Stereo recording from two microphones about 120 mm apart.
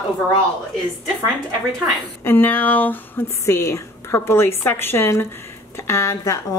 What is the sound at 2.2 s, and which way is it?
Speech, 15° left (ahead or behind).